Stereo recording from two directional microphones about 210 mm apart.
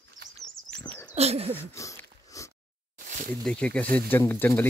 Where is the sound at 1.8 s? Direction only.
15° left (ahead or behind).